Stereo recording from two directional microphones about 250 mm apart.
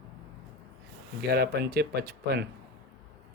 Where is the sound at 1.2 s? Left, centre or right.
Right.